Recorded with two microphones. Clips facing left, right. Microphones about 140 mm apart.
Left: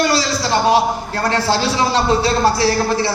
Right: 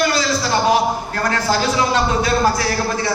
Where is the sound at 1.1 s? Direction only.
30° left (ahead or behind).